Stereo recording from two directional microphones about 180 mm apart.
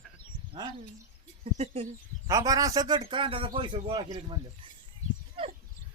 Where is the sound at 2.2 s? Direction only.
20° right (ahead or behind).